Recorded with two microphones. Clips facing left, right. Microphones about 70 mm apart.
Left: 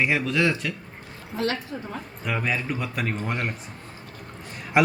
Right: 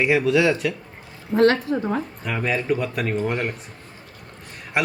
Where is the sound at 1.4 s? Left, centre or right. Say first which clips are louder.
Right 10 dB; right.